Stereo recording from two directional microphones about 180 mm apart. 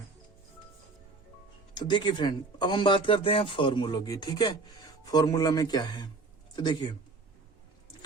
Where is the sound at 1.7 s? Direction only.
25° left (ahead or behind).